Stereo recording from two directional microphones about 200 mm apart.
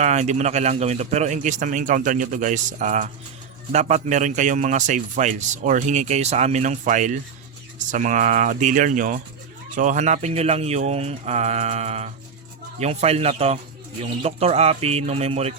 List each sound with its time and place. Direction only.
0.0 s a man's voice: 35° right (ahead or behind)